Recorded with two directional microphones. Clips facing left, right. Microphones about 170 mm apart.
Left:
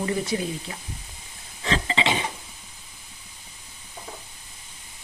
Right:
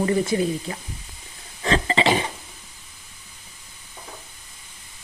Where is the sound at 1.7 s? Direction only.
45° right (ahead or behind).